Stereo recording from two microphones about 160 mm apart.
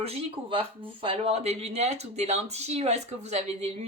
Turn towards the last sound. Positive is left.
turn(degrees=-45)  # may be behind; listen again after turning